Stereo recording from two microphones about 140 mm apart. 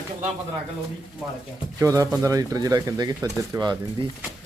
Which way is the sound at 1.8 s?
25° right (ahead or behind).